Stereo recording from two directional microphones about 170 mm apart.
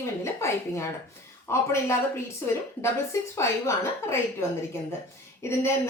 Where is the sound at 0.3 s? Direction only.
15° left (ahead or behind).